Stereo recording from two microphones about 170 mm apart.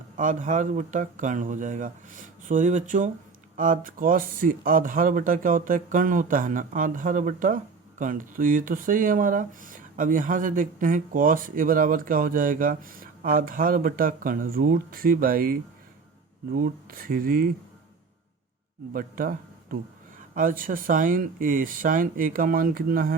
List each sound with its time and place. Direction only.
0.2 s speech: 50° right (ahead or behind)
18.9 s a man's voice: 55° right (ahead or behind)